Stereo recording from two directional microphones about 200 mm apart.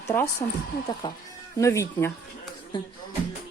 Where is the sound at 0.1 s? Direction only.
10° left (ahead or behind).